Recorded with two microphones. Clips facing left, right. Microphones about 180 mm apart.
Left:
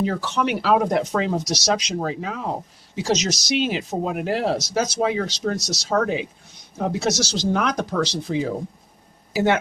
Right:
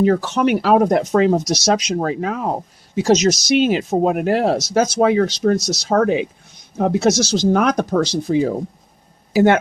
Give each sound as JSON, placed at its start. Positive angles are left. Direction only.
{"t": 0.0, "sound": "speech", "side_deg": -50}